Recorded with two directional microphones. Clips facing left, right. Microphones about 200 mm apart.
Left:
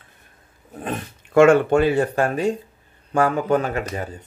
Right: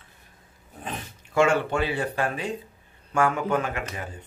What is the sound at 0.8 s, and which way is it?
Speech, 55° left (ahead or behind).